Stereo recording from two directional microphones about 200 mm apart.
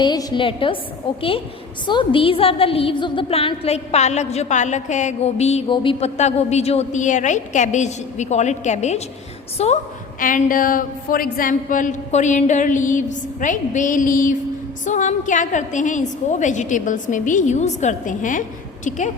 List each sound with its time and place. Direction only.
0.0 s a woman's voice: 20° left (ahead or behind)
10.2 s a woman's voice: 45° left (ahead or behind)